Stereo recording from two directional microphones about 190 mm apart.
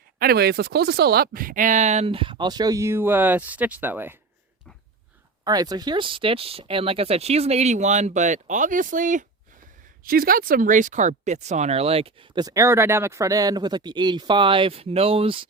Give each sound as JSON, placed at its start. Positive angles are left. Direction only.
{"t": 0.2, "sound": "speech", "side_deg": -55}
{"t": 5.5, "sound": "speech", "side_deg": -20}